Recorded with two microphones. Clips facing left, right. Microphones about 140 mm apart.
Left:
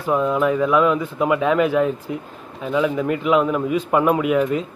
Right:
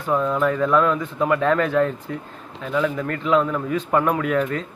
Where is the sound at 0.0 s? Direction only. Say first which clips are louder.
Left 2 dB; 15° left (ahead or behind).